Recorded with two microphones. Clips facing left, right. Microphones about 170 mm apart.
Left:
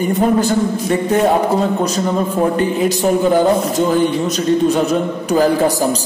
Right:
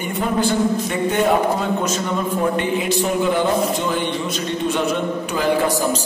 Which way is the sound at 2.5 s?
40° left (ahead or behind).